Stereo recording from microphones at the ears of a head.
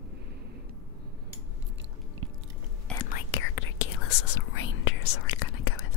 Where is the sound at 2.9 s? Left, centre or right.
Left.